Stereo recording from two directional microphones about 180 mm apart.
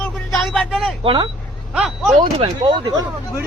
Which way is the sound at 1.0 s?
25° right (ahead or behind).